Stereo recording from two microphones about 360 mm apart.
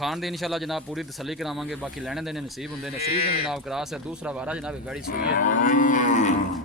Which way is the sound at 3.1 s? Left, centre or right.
Left.